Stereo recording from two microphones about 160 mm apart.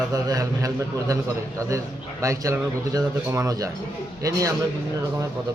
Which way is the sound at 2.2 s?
20° right (ahead or behind).